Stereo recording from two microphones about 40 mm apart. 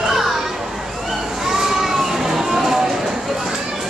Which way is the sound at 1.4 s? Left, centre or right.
Centre.